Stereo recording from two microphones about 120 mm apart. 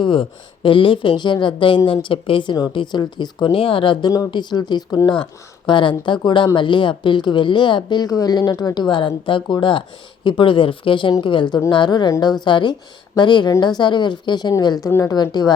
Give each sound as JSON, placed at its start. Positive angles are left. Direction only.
{"t": 0.0, "sound": "a woman's voice", "side_deg": 45}
{"t": 14.8, "sound": "a woman's voice", "side_deg": 20}
{"t": 15.1, "sound": "a woman's voice", "side_deg": 35}